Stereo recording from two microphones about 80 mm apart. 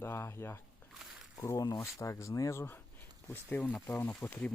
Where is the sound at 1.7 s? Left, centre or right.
Left.